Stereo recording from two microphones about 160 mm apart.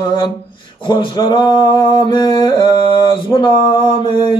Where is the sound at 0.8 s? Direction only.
30° left (ahead or behind).